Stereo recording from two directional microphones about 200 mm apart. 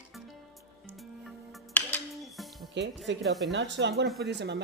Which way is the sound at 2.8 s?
60° right (ahead or behind).